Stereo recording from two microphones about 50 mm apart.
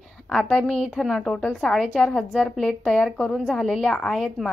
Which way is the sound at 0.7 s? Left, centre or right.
Centre.